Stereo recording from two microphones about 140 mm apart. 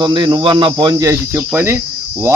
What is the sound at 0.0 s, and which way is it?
A man's voice, 35° right (ahead or behind).